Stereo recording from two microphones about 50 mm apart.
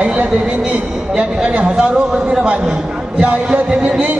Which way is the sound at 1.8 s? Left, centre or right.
Centre.